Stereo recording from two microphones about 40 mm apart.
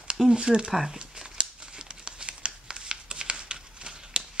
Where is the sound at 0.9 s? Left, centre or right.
Centre.